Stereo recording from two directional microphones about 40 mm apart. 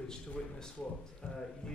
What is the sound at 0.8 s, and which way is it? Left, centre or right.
Speech, left.